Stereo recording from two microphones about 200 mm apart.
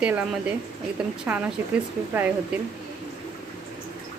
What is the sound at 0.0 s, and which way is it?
Speech, 5° right (ahead or behind).